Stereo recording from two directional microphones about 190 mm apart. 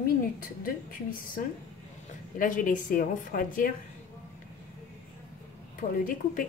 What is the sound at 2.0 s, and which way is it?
Speech, 45° left (ahead or behind).